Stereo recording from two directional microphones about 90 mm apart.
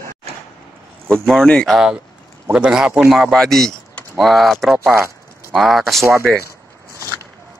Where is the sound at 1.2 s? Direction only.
5° left (ahead or behind).